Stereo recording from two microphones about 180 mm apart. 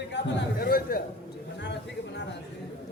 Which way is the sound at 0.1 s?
65° left (ahead or behind).